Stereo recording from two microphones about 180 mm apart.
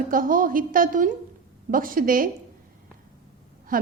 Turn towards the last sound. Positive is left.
turn(degrees=-50)  # may be behind; listen again after turning